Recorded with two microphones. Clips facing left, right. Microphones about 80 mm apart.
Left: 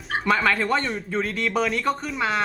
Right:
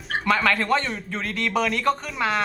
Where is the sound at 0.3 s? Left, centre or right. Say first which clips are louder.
Even; centre.